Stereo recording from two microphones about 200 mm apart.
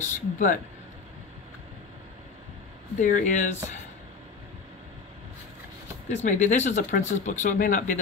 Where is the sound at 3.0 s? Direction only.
40° left (ahead or behind).